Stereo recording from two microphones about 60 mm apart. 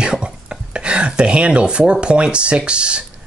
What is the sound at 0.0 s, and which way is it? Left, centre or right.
Speech, centre.